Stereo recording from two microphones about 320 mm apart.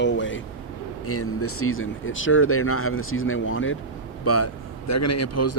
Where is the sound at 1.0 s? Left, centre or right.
Left.